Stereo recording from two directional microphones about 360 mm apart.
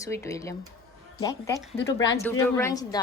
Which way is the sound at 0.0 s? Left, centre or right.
Centre.